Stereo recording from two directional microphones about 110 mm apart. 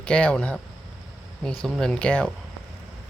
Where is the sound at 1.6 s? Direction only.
5° left (ahead or behind).